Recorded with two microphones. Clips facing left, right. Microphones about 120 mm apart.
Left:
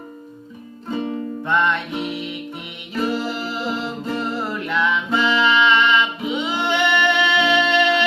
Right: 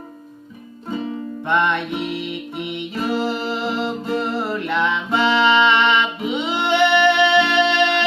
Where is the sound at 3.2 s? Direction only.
25° right (ahead or behind).